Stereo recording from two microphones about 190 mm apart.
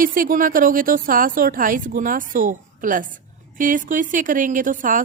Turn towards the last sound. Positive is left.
turn(degrees=-45)  # may be behind; listen again after turning